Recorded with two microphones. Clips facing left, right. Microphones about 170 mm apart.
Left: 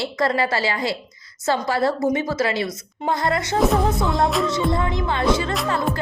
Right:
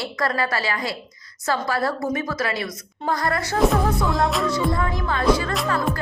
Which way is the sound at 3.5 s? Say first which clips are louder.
Even; centre (ahead or behind).